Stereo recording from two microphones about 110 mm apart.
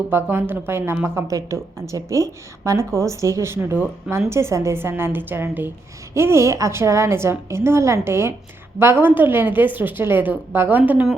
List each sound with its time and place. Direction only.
0.1 s a woman's voice: 20° right (ahead or behind)